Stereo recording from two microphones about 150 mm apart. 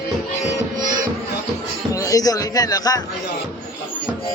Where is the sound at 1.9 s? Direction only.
25° left (ahead or behind).